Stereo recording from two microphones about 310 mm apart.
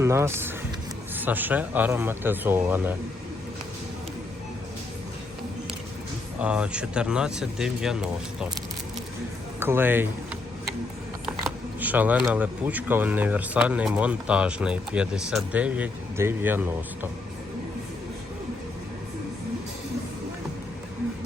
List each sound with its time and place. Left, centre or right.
0.0 s speech: centre
6.4 s speech: centre
9.6 s speech: centre
11.4 s speech: centre